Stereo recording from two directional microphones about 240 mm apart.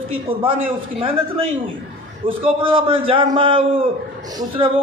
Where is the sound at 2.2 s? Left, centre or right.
Right.